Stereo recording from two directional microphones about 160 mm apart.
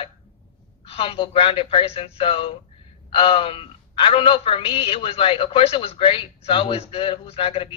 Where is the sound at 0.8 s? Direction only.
35° left (ahead or behind).